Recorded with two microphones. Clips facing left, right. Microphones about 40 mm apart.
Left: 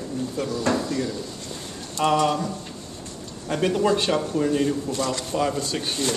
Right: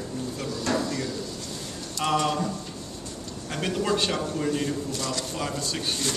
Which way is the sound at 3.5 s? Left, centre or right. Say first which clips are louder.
Left 5 dB; centre.